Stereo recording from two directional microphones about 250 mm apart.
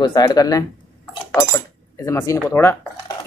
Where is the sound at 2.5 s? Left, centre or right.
Centre.